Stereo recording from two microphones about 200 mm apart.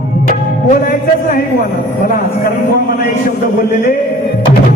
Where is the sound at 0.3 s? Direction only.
45° left (ahead or behind).